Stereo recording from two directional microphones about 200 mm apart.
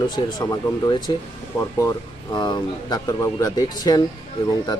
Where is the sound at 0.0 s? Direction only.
20° left (ahead or behind).